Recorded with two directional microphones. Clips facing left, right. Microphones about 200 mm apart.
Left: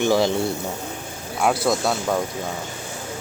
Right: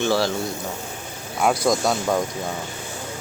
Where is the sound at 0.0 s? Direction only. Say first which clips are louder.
Left 2 dB; 15° left (ahead or behind).